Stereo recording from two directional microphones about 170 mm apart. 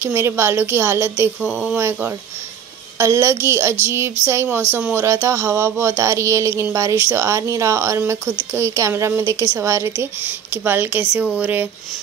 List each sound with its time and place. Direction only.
0.0 s speech: 15° right (ahead or behind)